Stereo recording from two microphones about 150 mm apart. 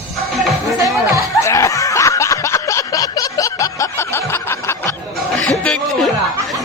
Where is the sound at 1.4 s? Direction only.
20° left (ahead or behind).